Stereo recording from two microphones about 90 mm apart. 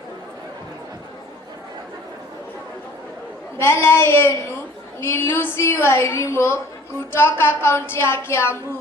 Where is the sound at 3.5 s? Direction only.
25° left (ahead or behind).